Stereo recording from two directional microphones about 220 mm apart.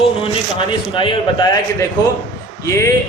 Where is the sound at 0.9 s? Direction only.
20° left (ahead or behind).